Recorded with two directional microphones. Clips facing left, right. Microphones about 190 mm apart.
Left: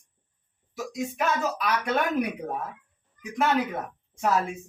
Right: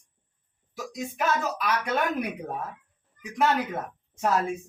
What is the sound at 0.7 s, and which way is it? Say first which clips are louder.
Speech: left 3 dB; centre (ahead or behind).